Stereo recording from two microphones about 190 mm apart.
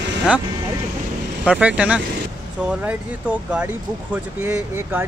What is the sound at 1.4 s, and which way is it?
Speech, 5° right (ahead or behind).